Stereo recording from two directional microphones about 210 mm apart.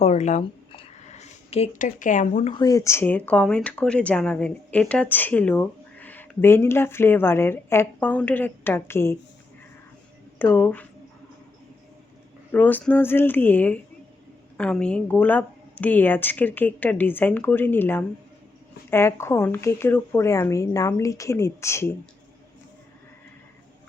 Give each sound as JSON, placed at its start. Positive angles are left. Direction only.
{"t": 0.0, "sound": "speech", "side_deg": 35}
{"t": 2.5, "sound": "speech", "side_deg": 15}
{"t": 10.3, "sound": "speech", "side_deg": 10}
{"t": 12.5, "sound": "speech", "side_deg": 10}